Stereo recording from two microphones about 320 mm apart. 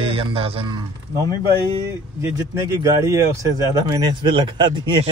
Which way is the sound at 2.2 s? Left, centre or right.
Centre.